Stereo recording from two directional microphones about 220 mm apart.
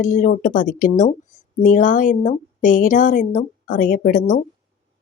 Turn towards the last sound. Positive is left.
turn(degrees=40)  # may be behind; listen again after turning